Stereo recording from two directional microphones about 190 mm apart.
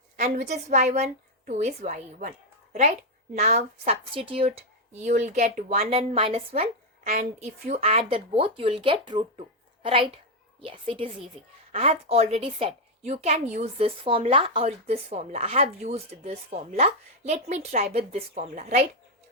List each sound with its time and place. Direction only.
0.2 s a woman's voice: 40° right (ahead or behind)
3.3 s a woman's voice: 35° right (ahead or behind)